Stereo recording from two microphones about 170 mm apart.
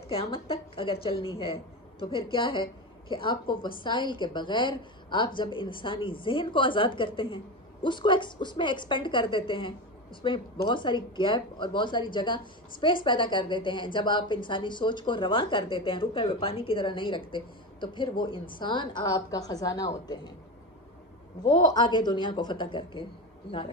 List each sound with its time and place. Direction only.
0.1 s a woman's voice: 35° left (ahead or behind)
21.6 s a woman's voice: 25° left (ahead or behind)